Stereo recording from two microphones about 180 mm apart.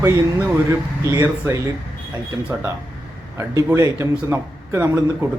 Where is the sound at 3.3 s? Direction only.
15° right (ahead or behind).